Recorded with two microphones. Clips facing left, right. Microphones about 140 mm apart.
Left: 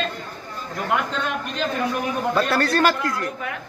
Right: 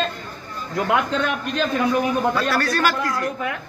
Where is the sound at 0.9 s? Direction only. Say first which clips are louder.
Right 3 dB; 75° right (ahead or behind).